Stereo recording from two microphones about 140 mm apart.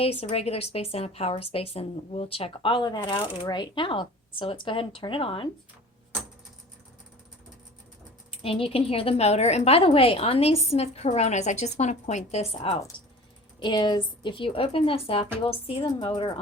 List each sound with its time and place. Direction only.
0.0 s a woman's voice: 45° left (ahead or behind)
8.3 s a woman's voice: 40° left (ahead or behind)
12.9 s speech: 35° left (ahead or behind)